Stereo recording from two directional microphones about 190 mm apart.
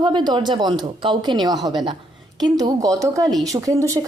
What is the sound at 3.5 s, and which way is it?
Speech, 15° right (ahead or behind).